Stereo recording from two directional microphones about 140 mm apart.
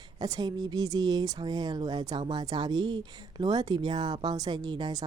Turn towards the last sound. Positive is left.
turn(degrees=-30)  # may be behind; listen again after turning